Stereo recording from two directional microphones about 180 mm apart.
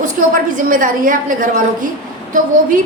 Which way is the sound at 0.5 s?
50° right (ahead or behind).